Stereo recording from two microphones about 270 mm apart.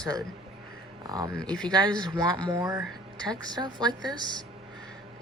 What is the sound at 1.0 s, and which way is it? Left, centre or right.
Speech, centre.